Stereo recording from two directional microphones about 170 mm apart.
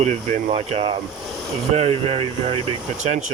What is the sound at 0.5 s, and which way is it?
Speech, 35° right (ahead or behind).